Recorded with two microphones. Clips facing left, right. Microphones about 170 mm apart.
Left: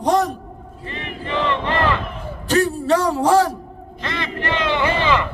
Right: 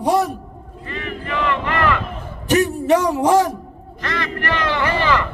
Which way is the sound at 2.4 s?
15° right (ahead or behind).